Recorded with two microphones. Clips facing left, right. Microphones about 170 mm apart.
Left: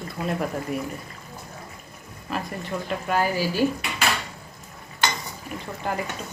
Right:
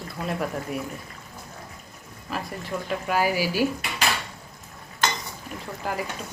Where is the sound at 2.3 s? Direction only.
Centre (ahead or behind).